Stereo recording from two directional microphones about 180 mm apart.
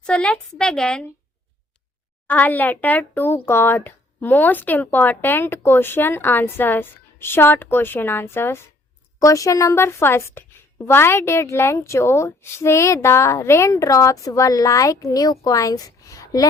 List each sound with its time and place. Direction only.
0.0 s a woman's voice: 5° left (ahead or behind)
2.2 s a woman's voice: 10° left (ahead or behind)